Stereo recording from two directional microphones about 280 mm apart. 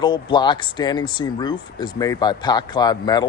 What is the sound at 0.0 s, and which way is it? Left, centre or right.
Speech, centre.